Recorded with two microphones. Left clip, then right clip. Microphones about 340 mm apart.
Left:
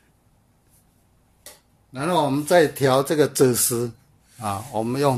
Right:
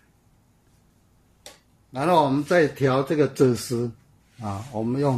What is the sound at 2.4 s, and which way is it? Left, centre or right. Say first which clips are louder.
Speech: left 3 dB; centre.